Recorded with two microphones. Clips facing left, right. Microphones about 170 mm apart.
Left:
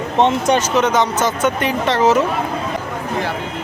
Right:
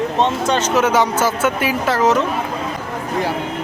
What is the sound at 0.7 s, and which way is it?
Speech, 10° right (ahead or behind).